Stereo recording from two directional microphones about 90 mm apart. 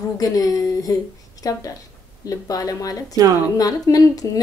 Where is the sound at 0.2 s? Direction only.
40° left (ahead or behind).